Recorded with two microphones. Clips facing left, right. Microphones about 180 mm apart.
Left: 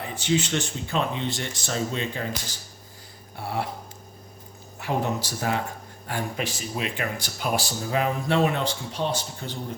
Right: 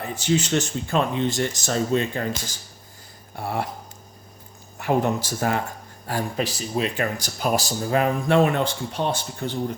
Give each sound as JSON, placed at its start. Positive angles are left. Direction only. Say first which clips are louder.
{"t": 0.0, "sound": "speech", "louder": "right 2 dB", "side_deg": -40}
{"t": 3.3, "sound": "speech", "louder": "right 2 dB", "side_deg": -45}
{"t": 4.8, "sound": "speech", "louder": "right 5 dB", "side_deg": -50}
{"t": 6.1, "sound": "speech", "louder": "right 4 dB", "side_deg": -35}